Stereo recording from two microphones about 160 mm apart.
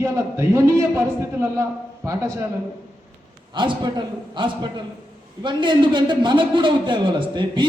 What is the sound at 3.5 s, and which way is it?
A man's voice, 30° right (ahead or behind).